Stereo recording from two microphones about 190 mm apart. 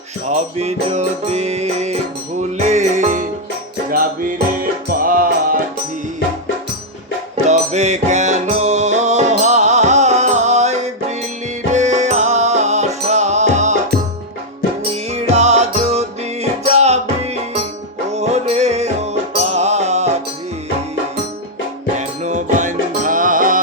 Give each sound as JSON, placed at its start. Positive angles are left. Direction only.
{"t": 0.3, "sound": "music", "side_deg": -35}
{"t": 4.9, "sound": "music", "side_deg": -50}
{"t": 7.4, "sound": "music", "side_deg": -35}
{"t": 14.9, "sound": "music", "side_deg": -35}
{"t": 21.9, "sound": "music", "side_deg": -40}